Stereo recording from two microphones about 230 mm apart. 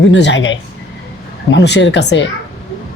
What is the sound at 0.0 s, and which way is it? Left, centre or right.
Speech, left.